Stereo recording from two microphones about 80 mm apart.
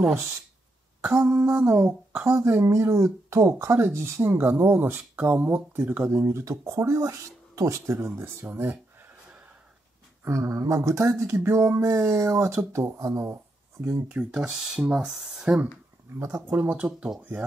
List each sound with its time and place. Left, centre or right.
1.0 s speech: right
10.2 s speech: right
14.0 s speech: centre
16.4 s speech: right
16.8 s speech: centre